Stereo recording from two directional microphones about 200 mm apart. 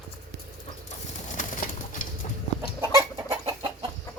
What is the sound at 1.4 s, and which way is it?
Bird, 40° left (ahead or behind).